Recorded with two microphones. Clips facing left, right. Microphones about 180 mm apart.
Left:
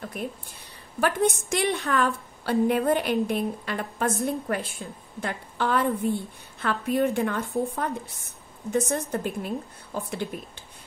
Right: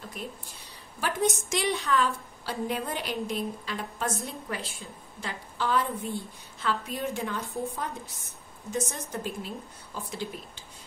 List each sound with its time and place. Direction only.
0.2 s a woman's voice: 55° left (ahead or behind)